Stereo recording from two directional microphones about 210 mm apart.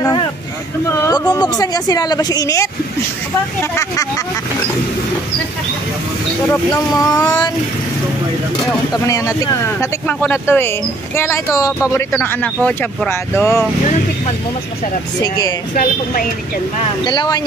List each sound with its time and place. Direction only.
0.0 s a woman's voice: 20° left (ahead or behind)
3.7 s a woman's voice: 15° left (ahead or behind)
6.5 s a woman's voice: 15° left (ahead or behind)
8.9 s a woman's voice: 15° left (ahead or behind)
15.2 s speech: 20° left (ahead or behind)
15.7 s speech: 45° left (ahead or behind)
17.0 s speech: 20° left (ahead or behind)